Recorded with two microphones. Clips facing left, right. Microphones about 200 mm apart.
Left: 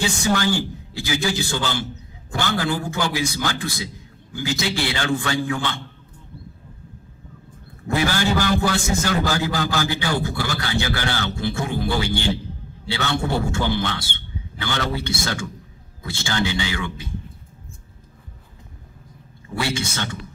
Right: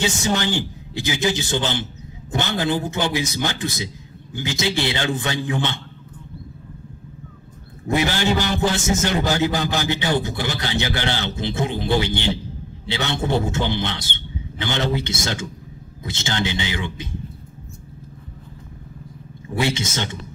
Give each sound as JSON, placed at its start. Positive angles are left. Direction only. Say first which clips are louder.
{"t": 0.0, "sound": "a man's voice", "louder": "left 1 dB", "side_deg": -20}
{"t": 7.9, "sound": "a man's voice", "louder": "right 1 dB", "side_deg": -20}
{"t": 19.5, "sound": "a man's voice", "louder": "right 3 dB", "side_deg": -20}